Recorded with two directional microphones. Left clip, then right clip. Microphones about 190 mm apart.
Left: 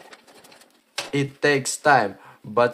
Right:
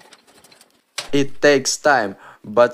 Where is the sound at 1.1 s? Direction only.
25° right (ahead or behind).